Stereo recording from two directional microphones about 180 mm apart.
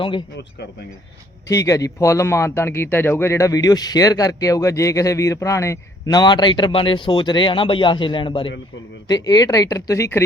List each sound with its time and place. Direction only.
1.5 s speech: 20° left (ahead or behind)